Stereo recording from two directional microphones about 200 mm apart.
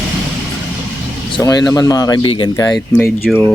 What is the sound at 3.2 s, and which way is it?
Speech, centre (ahead or behind).